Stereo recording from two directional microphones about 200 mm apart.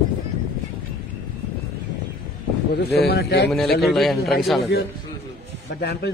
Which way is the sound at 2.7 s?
55° left (ahead or behind).